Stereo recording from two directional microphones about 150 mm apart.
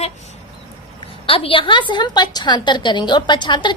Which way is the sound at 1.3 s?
35° left (ahead or behind).